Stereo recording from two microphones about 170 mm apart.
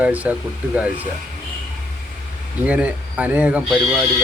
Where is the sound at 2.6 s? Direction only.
10° right (ahead or behind).